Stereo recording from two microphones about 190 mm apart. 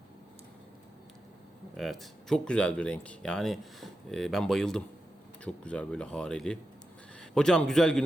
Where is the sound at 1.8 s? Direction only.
Centre (ahead or behind).